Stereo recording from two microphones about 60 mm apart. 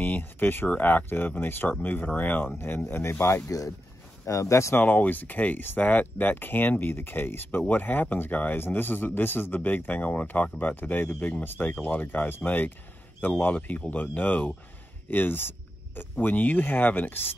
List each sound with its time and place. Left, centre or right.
0.0 s a man's voice: left
3.4 s speech: left
4.3 s speech: left
4.8 s a man's voice: left